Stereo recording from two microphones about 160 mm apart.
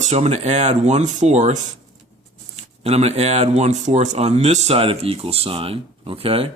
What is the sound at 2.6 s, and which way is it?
Speech, 40° right (ahead or behind).